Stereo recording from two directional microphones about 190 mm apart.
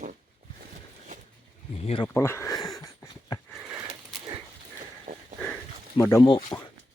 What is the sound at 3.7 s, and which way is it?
Wheeze, 20° right (ahead or behind).